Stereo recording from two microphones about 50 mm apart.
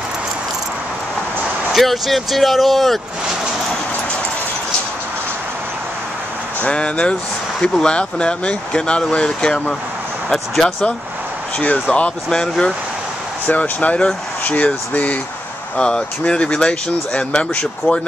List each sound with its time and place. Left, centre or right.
1.7 s speech: centre
6.6 s speech: left
11.9 s speech: left
13.5 s speech: left
15.8 s speech: centre